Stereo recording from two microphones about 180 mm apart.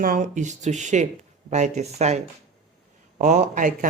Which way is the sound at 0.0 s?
45° right (ahead or behind).